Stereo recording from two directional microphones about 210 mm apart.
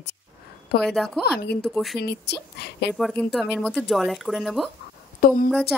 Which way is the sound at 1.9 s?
50° left (ahead or behind).